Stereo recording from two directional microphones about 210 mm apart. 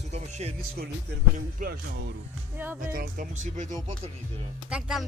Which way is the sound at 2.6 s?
10° right (ahead or behind).